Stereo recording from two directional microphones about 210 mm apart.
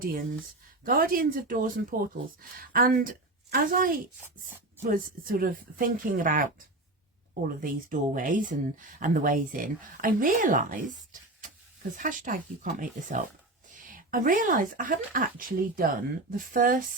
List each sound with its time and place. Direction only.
0.0 s speech: 40° right (ahead or behind)